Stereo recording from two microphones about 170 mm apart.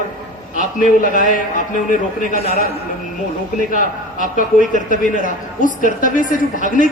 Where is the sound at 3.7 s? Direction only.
50° left (ahead or behind).